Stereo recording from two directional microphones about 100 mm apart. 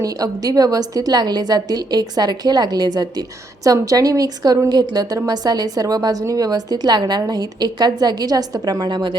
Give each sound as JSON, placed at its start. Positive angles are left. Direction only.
{"t": 0.0, "sound": "a woman's voice", "side_deg": -35}